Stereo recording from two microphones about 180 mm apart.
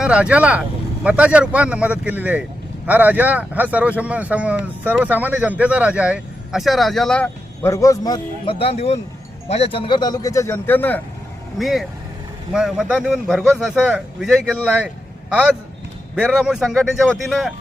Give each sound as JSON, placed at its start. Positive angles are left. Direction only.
{"t": 0.0, "sound": "speech", "side_deg": -5}
{"t": 11.5, "sound": "a man's voice", "side_deg": 0}